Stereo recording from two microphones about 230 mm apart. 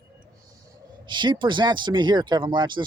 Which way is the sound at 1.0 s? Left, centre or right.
Centre.